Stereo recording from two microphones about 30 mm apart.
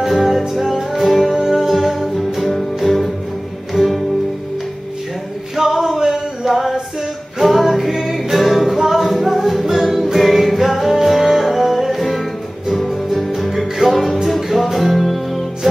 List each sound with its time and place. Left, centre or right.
0.0 s music: centre
1.3 s music: centre
1.7 s music: centre
5.6 s a sound: right
6.4 s music: centre
13.1 s music: centre
13.8 s music: centre